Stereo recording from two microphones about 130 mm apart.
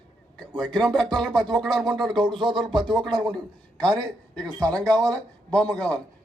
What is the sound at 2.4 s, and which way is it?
Speech, 40° right (ahead or behind).